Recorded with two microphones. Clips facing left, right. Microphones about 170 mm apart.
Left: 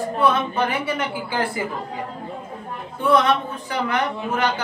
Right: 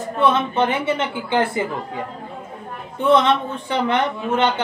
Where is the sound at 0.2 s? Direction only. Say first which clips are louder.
Right 3 dB; 25° right (ahead or behind).